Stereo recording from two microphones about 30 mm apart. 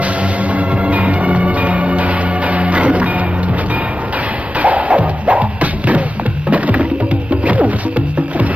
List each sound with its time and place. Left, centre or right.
0.8 s music: right
4.6 s music: right
6.5 s music: right